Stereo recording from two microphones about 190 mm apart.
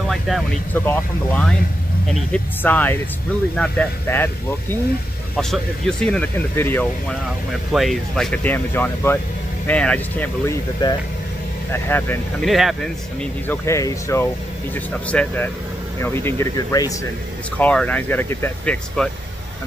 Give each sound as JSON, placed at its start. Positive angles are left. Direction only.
{"t": 0.7, "sound": "speech", "side_deg": 10}
{"t": 10.8, "sound": "speech", "side_deg": 20}
{"t": 11.7, "sound": "speech", "side_deg": 10}
{"t": 12.4, "sound": "speech", "side_deg": 0}
{"t": 13.7, "sound": "speech", "side_deg": 15}
{"t": 17.6, "sound": "speech", "side_deg": 5}